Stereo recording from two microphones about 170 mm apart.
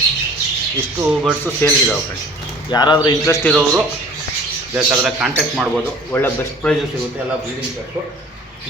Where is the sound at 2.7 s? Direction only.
25° left (ahead or behind).